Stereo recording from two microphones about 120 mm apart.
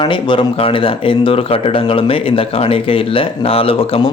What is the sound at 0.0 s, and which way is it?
Speech, 45° left (ahead or behind).